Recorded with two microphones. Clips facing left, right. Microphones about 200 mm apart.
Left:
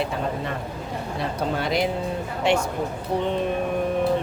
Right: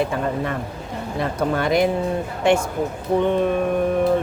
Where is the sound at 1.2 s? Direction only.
50° right (ahead or behind).